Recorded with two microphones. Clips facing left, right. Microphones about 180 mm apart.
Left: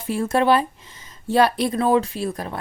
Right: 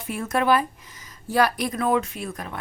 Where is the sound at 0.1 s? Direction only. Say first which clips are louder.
Left 3 dB; 30° left (ahead or behind).